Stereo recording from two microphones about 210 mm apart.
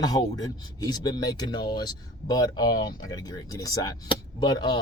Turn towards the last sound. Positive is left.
turn(degrees=20)  # may be behind; listen again after turning